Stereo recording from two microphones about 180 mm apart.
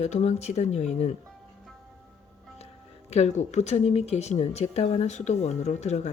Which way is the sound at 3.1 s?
40° left (ahead or behind).